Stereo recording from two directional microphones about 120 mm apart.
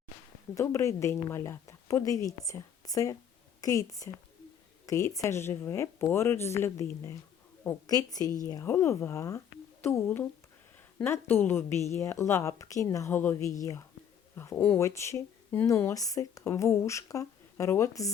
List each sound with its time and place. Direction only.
0.5 s a woman's voice: 25° left (ahead or behind)
13.6 s speech: 30° left (ahead or behind)